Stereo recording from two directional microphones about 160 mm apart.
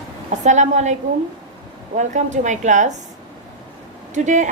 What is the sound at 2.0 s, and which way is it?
Speech, 50° right (ahead or behind).